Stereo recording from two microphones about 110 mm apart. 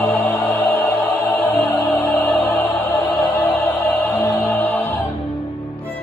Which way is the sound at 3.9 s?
20° left (ahead or behind).